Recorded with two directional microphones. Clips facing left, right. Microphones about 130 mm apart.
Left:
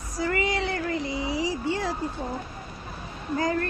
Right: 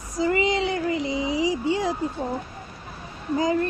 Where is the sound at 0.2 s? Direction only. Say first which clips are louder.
Right 4 dB; 20° right (ahead or behind).